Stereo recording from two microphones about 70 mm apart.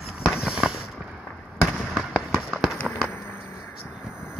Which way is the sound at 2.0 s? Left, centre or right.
Centre.